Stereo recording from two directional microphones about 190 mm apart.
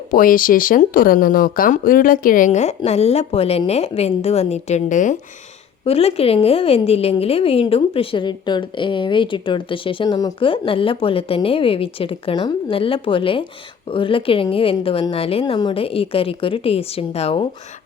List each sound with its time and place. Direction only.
0.1 s speech: 45° left (ahead or behind)
5.8 s a woman's voice: 30° left (ahead or behind)